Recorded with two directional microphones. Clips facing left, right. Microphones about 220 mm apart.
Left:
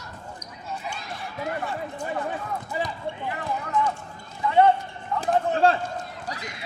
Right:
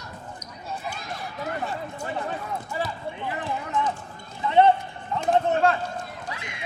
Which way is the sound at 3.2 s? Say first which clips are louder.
Right 1 dB; 20° right (ahead or behind).